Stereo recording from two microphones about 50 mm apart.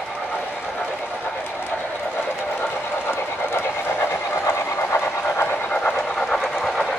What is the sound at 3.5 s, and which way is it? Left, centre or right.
Train, left.